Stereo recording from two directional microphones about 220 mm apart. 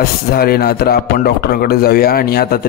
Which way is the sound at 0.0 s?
45° left (ahead or behind).